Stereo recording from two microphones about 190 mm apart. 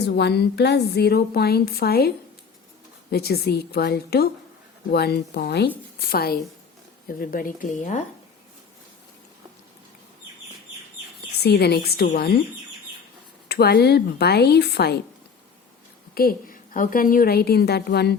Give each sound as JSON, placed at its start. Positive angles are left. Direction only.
{"t": 0.0, "sound": "a woman's voice", "side_deg": 60}
{"t": 11.4, "sound": "a woman's voice", "side_deg": 60}
{"t": 13.5, "sound": "a woman's voice", "side_deg": 55}
{"t": 16.1, "sound": "a woman's voice", "side_deg": 50}